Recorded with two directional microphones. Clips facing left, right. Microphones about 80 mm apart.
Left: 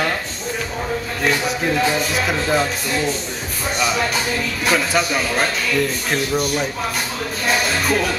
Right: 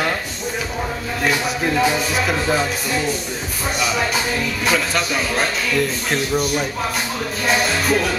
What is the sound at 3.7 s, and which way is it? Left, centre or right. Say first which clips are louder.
Music: left 1 dB; centre.